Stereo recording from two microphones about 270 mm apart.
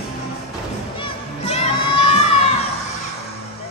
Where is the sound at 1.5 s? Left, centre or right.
Left.